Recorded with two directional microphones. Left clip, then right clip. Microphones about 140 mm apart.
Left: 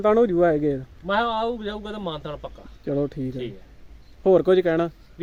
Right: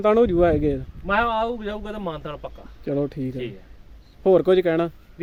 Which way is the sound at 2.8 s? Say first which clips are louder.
Even; 5° right (ahead or behind).